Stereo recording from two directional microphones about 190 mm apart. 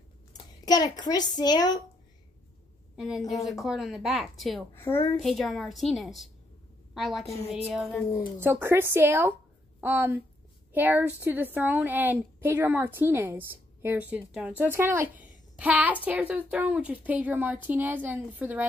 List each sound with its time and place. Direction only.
0.3 s a child's voice: 20° left (ahead or behind)
3.0 s speech: centre (ahead or behind)
8.4 s a woman's voice: 10° right (ahead or behind)